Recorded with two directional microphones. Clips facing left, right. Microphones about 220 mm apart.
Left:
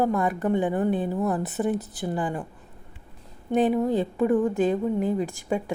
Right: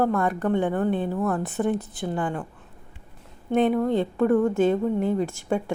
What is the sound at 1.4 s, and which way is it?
A woman's voice, 5° left (ahead or behind).